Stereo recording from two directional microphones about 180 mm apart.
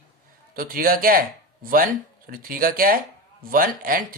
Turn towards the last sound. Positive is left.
turn(degrees=-50)  # may be behind; listen again after turning